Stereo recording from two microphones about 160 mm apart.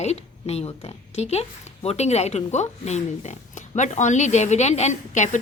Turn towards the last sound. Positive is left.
turn(degrees=50)  # may be behind; listen again after turning